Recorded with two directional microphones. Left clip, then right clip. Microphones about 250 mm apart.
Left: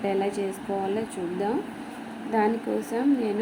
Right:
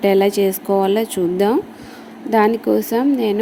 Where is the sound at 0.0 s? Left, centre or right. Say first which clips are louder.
Right 12 dB; right.